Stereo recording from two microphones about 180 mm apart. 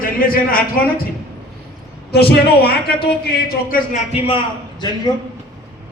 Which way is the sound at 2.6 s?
60° left (ahead or behind).